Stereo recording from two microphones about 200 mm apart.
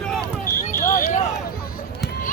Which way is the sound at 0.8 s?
45° left (ahead or behind).